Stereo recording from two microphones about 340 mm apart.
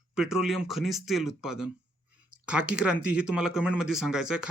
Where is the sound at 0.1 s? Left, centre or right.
Centre.